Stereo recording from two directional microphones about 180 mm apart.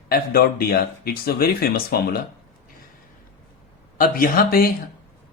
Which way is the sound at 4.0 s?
55° left (ahead or behind).